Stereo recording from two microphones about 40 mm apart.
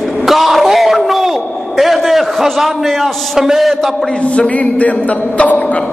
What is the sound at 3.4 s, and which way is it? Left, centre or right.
Speech, centre.